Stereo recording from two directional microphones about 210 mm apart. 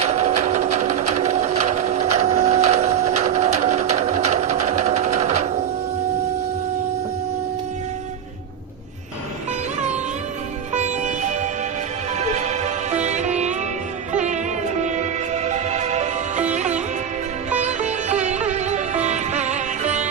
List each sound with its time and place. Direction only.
0.0 s sewing machine: 30° right (ahead or behind)
2.1 s printer: 30° right (ahead or behind)
3.2 s sewing machine: 30° right (ahead or behind)
10.8 s sitar: 35° right (ahead or behind)
12.2 s music: 35° right (ahead or behind)
14.8 s music: 35° right (ahead or behind)
17.6 s sitar: 35° right (ahead or behind)